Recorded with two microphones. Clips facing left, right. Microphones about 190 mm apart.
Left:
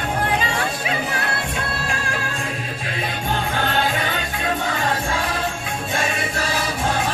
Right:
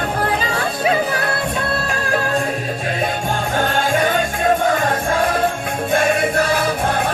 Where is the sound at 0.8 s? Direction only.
35° right (ahead or behind).